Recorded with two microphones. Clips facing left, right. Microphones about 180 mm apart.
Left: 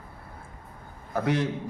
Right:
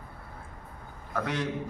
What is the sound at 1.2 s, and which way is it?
Speech, 30° left (ahead or behind).